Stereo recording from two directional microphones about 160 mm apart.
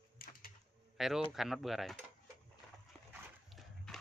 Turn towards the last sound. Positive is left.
turn(degrees=5)  # may be behind; listen again after turning